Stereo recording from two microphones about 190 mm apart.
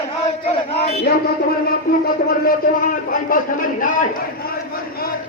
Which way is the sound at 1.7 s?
50° left (ahead or behind).